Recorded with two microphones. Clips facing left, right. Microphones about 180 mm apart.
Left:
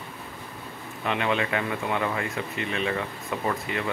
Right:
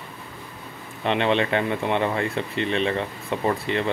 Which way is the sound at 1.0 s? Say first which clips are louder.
Right 5 dB; 30° right (ahead or behind).